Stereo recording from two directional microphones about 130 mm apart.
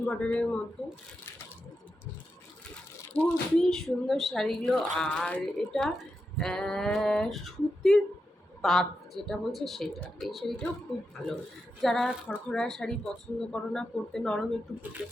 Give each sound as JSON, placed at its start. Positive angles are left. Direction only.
{"t": 0.0, "sound": "speech", "side_deg": 5}
{"t": 3.2, "sound": "a woman's voice", "side_deg": 5}